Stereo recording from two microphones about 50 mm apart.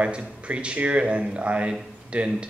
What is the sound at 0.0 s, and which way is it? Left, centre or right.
Speech, right.